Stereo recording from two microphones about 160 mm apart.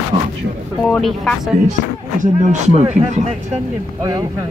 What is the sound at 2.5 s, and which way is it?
Speech, 40° right (ahead or behind).